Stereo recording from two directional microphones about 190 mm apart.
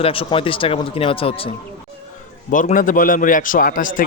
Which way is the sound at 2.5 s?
45° left (ahead or behind).